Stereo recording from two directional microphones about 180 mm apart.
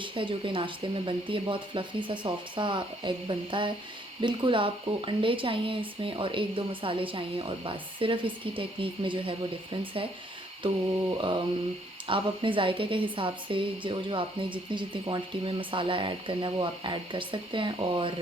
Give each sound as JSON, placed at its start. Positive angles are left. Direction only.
{"t": 0.0, "sound": "a woman's voice", "side_deg": -25}
{"t": 11.2, "sound": "a woman's voice", "side_deg": -25}